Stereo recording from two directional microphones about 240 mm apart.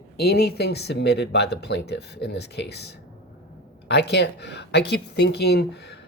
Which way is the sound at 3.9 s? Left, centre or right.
Left.